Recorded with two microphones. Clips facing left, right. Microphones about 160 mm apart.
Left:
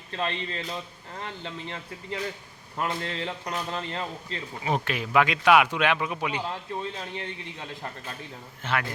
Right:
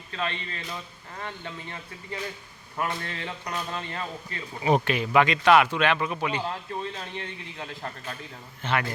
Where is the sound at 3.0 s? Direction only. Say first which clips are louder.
Left 3 dB; 25° left (ahead or behind).